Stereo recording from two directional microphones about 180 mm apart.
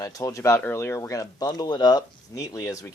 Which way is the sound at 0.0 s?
20° left (ahead or behind).